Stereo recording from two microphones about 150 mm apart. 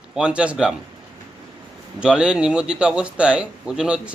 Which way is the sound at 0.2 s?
5° right (ahead or behind).